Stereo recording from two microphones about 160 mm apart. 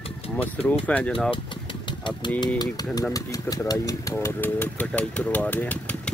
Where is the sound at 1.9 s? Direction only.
30° left (ahead or behind).